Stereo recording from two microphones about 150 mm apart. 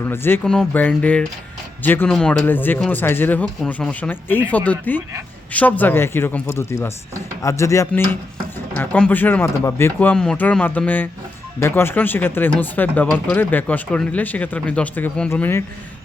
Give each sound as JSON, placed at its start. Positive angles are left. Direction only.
{"t": 0.0, "sound": "speech", "side_deg": 15}
{"t": 0.4, "sound": "speech", "side_deg": 5}